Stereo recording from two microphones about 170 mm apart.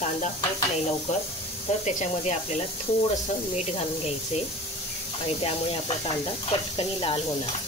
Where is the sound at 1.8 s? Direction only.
40° left (ahead or behind).